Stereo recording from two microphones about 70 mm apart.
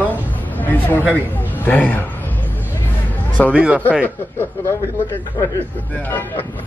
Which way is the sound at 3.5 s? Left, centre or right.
Centre.